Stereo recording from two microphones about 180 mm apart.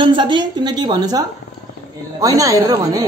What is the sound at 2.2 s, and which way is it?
Speech, 20° right (ahead or behind).